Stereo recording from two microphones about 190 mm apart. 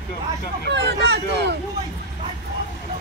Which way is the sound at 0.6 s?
60° right (ahead or behind).